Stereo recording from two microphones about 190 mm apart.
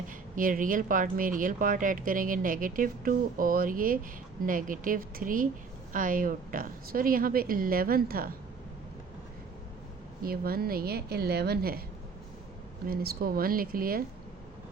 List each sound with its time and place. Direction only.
0.3 s speech: 45° right (ahead or behind)
10.2 s speech: 50° right (ahead or behind)
12.9 s speech: 50° right (ahead or behind)